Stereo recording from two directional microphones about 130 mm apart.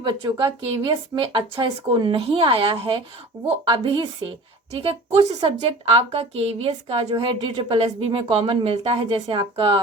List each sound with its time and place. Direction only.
0.0 s speech: 40° right (ahead or behind)
3.3 s a woman's voice: 20° right (ahead or behind)
3.7 s a woman's voice: 40° right (ahead or behind)